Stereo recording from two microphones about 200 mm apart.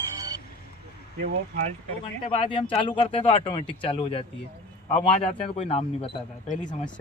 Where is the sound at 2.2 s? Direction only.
25° left (ahead or behind).